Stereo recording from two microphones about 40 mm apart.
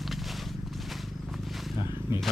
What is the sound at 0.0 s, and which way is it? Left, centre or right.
Walk, centre.